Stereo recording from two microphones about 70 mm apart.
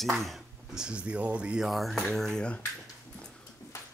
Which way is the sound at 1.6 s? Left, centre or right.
Centre.